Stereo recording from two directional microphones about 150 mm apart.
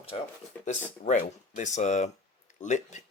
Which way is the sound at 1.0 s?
55° left (ahead or behind).